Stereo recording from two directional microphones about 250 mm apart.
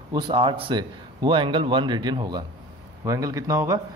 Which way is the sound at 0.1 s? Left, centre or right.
Centre.